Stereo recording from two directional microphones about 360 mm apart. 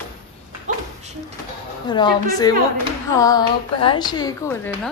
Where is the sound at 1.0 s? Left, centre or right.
Centre.